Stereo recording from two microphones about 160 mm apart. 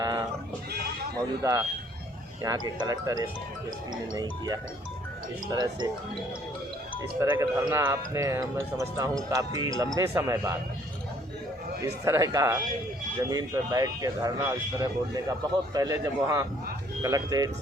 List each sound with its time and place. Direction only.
0.0 s goat: 25° right (ahead or behind)
1.4 s speech: 20° right (ahead or behind)
7.3 s speech: 15° right (ahead or behind)
12.0 s speech: 20° right (ahead or behind)